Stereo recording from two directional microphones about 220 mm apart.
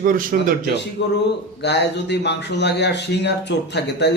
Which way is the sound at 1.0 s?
50° left (ahead or behind).